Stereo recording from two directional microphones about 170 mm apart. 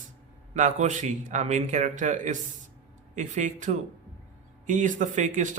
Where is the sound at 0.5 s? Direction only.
45° right (ahead or behind).